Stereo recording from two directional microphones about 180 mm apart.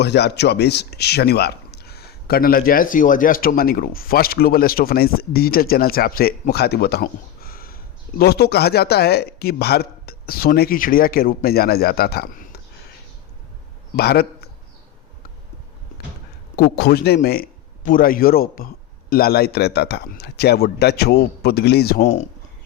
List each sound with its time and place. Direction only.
0.0 s speech: 70° left (ahead or behind)
13.9 s a man's voice: 60° left (ahead or behind)
16.6 s speech: 60° left (ahead or behind)
22.0 s speech: 40° left (ahead or behind)